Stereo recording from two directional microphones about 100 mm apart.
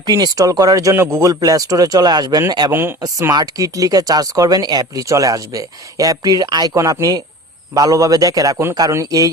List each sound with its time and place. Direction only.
0.0 s speech: 40° right (ahead or behind)